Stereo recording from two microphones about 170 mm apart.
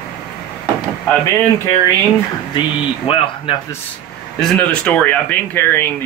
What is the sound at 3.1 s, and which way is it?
Speech, 35° left (ahead or behind).